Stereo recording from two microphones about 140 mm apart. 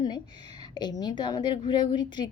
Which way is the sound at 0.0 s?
30° left (ahead or behind).